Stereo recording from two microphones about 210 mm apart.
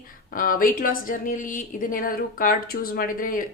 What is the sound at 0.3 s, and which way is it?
A woman's voice, 40° left (ahead or behind).